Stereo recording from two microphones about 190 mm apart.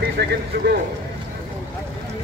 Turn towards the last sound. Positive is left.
turn(degrees=-55)  # may be behind; listen again after turning